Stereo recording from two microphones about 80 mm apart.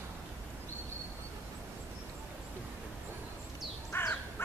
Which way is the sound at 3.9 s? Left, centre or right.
Left.